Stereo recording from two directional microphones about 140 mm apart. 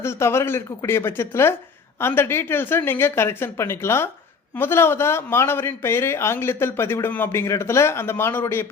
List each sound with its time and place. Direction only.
0.0 s a man's voice: 20° left (ahead or behind)